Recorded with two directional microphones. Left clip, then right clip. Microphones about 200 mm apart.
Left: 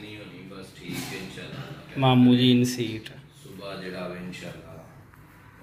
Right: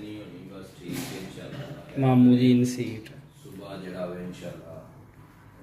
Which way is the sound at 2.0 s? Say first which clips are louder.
Left 1 dB; 20° left (ahead or behind).